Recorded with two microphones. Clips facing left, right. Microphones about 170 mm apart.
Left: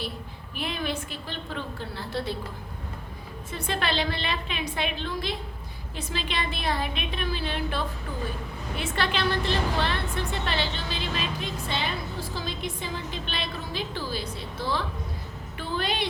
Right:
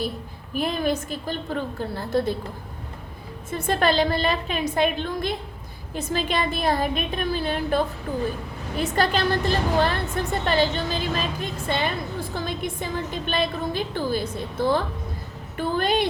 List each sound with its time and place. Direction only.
0.5 s a woman's voice: 45° right (ahead or behind)
3.5 s a woman's voice: 45° right (ahead or behind)